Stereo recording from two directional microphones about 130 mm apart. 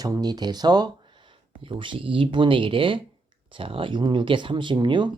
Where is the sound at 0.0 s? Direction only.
30° right (ahead or behind).